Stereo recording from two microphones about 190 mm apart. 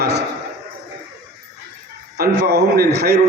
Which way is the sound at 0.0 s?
60° right (ahead or behind).